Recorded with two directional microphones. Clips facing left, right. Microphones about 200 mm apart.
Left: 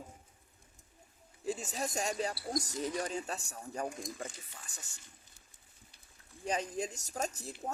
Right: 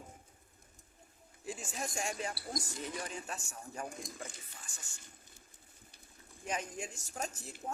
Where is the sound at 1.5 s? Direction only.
35° left (ahead or behind).